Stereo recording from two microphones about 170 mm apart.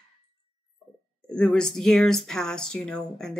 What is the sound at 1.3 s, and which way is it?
Speech, 5° left (ahead or behind).